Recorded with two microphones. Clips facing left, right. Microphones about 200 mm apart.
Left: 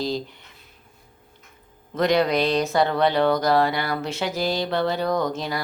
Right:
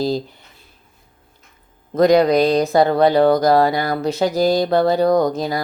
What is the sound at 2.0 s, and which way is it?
Speech, 40° right (ahead or behind).